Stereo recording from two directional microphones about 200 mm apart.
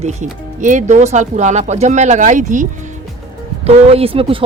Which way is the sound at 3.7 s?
30° right (ahead or behind).